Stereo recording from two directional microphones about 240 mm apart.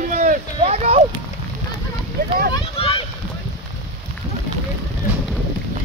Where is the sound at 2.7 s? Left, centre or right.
Left.